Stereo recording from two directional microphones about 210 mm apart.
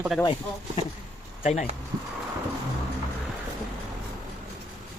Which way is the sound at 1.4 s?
35° left (ahead or behind).